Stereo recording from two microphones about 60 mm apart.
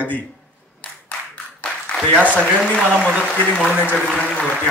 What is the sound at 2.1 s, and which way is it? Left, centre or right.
Speech, right.